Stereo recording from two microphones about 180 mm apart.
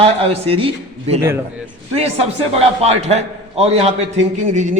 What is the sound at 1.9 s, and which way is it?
A man's voice, 35° right (ahead or behind).